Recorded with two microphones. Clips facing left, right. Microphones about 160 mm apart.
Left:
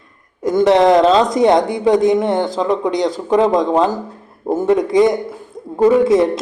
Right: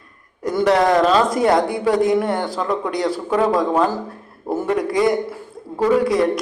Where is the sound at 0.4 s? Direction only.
20° left (ahead or behind).